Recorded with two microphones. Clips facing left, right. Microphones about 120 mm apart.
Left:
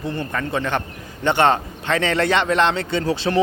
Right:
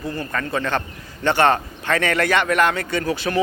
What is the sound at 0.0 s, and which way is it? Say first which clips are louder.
A man's voice: left 1 dB; 20° left (ahead or behind).